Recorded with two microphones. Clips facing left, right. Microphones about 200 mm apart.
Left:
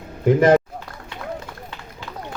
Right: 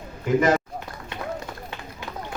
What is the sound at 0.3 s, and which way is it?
Speech, 55° left (ahead or behind).